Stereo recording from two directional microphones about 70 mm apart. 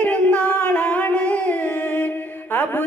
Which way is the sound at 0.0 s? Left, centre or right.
Centre.